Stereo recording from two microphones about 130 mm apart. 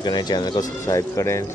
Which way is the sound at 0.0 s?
30° left (ahead or behind).